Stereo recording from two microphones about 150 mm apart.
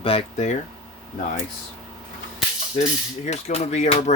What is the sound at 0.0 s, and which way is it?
Speech, 40° left (ahead or behind).